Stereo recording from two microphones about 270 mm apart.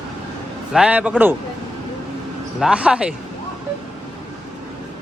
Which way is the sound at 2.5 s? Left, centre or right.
Centre.